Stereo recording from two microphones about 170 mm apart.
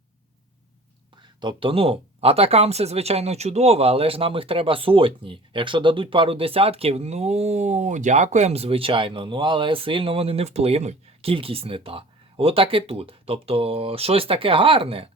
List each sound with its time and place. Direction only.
1.4 s speech: 30° right (ahead or behind)